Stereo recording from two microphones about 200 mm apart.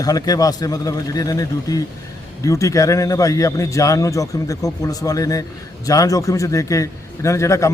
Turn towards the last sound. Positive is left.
turn(degrees=15)  # may be behind; listen again after turning